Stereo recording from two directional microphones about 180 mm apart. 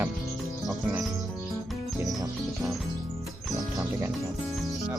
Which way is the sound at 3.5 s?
20° right (ahead or behind).